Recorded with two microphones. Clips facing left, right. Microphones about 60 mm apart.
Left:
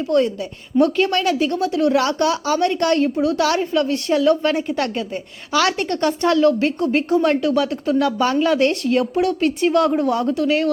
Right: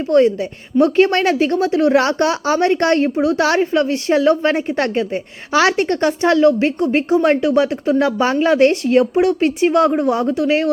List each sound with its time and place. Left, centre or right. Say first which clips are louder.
0.1 s speech: right 6 dB; right